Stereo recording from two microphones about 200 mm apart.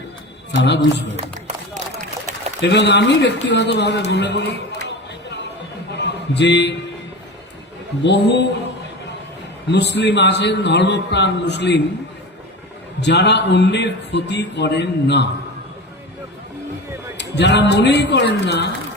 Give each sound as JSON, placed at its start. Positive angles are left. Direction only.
{"t": 0.5, "sound": "a man's voice", "side_deg": 60}
{"t": 1.1, "sound": "music", "side_deg": -35}
{"t": 2.6, "sound": "a man's voice", "side_deg": 60}
{"t": 5.9, "sound": "a sound", "side_deg": 60}
{"t": 8.0, "sound": "a man's voice", "side_deg": 60}
{"t": 9.7, "sound": "a man's voice", "side_deg": 60}
{"t": 13.0, "sound": "a man's voice", "side_deg": 60}
{"t": 17.2, "sound": "a man's voice", "side_deg": 60}